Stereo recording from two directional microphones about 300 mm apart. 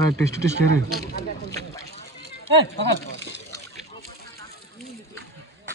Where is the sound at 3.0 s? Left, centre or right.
Left.